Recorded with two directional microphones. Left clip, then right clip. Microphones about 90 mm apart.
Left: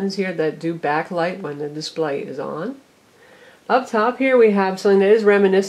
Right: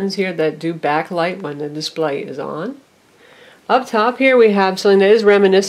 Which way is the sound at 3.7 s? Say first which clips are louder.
Right 3 dB; 30° right (ahead or behind).